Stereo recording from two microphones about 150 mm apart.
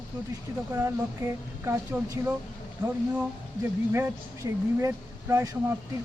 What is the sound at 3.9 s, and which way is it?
Speech, 15° right (ahead or behind).